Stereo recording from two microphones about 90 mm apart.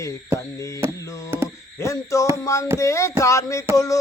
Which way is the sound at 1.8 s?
35° left (ahead or behind).